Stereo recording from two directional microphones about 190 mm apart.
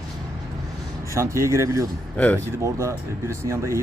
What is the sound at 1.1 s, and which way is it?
Speech, 15° right (ahead or behind).